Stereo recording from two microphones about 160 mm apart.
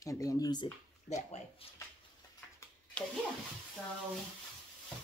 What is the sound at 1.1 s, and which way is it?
Speech, 45° left (ahead or behind).